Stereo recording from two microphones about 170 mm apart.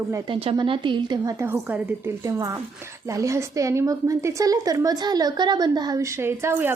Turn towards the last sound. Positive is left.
turn(degrees=-15)  # may be behind; listen again after turning